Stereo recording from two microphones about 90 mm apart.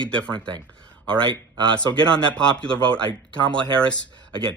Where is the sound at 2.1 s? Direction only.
10° left (ahead or behind).